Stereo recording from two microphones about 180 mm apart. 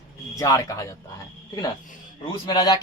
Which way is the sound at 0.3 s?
20° left (ahead or behind).